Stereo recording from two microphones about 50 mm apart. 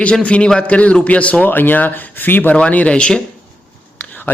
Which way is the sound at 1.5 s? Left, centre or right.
Left.